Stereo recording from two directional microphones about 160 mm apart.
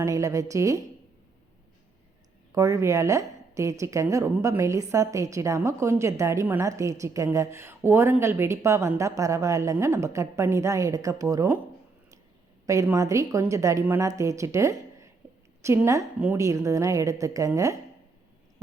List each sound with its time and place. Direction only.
0.0 s speech: 20° right (ahead or behind)
2.5 s speech: 20° right (ahead or behind)
12.6 s a woman's voice: 20° right (ahead or behind)